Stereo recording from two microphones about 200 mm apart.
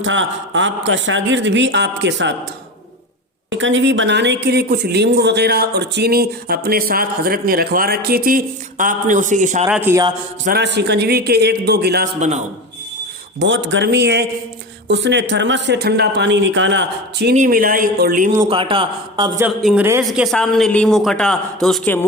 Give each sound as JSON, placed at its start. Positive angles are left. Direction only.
{"t": 0.0, "sound": "speech", "side_deg": -70}
{"t": 3.6, "sound": "speech", "side_deg": -70}
{"t": 9.6, "sound": "a woman's voice", "side_deg": -10}
{"t": 10.4, "sound": "speech", "side_deg": -55}
{"t": 13.4, "sound": "speech", "side_deg": -65}
{"t": 17.3, "sound": "speech", "side_deg": -45}
{"t": 18.4, "sound": "a man's voice", "side_deg": -25}
{"t": 19.4, "sound": "a woman's voice", "side_deg": -5}